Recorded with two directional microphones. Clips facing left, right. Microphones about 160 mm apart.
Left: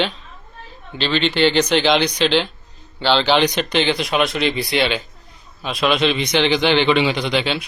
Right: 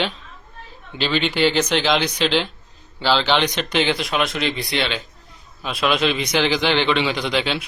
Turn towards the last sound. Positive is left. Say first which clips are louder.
# left 2 dB
turn(degrees=0)  # may be behind; listen again after turning